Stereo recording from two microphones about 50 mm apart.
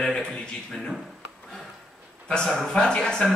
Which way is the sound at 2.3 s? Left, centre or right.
Centre.